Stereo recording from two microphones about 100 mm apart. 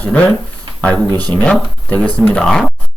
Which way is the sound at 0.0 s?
15° left (ahead or behind).